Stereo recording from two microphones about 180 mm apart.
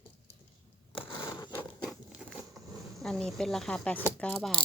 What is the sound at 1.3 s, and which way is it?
Zipper, 15° left (ahead or behind).